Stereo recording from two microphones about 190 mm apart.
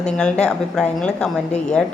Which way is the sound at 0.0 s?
5° left (ahead or behind).